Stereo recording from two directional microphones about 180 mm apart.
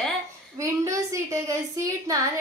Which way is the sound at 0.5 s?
15° right (ahead or behind).